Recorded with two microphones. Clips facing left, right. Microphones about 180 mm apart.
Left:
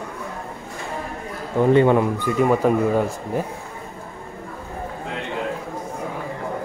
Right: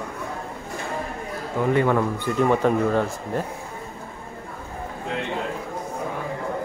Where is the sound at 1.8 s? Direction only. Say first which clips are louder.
Left 4 dB; 20° left (ahead or behind).